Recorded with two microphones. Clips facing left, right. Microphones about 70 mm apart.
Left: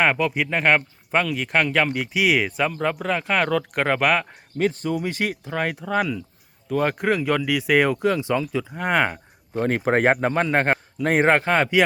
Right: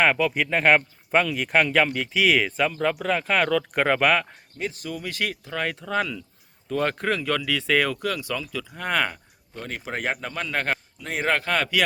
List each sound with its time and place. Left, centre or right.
0.0 s speech: centre
1.9 s speech: centre
4.5 s speech: left
9.5 s a man's voice: left
10.9 s a man's voice: left
11.3 s speech: left